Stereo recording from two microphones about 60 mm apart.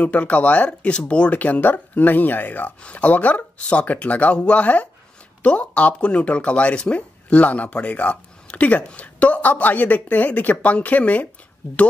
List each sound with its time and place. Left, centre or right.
0.0 s speech: left